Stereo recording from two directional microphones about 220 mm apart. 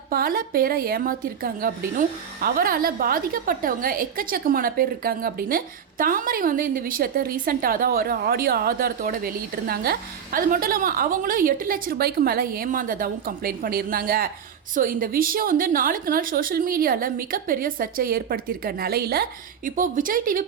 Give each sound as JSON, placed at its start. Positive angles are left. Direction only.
{"t": 0.1, "sound": "a woman's voice", "side_deg": -40}